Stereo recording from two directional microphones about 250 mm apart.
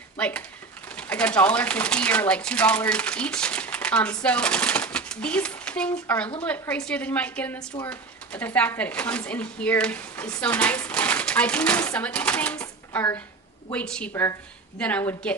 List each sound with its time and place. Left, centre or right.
0.2 s speech: centre